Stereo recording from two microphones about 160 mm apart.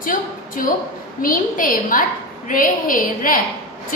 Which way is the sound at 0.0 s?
60° left (ahead or behind).